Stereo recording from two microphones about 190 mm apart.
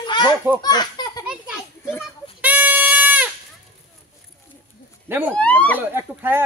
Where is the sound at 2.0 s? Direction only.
10° right (ahead or behind).